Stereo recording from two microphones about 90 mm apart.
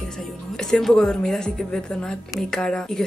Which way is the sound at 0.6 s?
5° left (ahead or behind).